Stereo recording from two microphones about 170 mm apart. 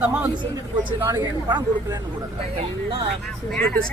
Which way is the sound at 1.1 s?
20° right (ahead or behind).